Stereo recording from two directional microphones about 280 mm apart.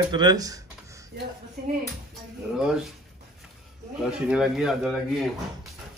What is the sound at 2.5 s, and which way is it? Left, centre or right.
Speech, centre.